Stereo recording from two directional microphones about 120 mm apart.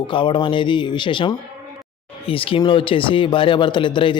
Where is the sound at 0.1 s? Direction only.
40° left (ahead or behind).